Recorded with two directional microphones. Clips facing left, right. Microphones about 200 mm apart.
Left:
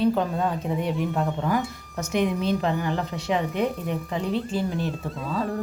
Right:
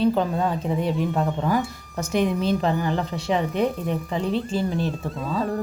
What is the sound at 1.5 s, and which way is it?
Speech, 30° right (ahead or behind).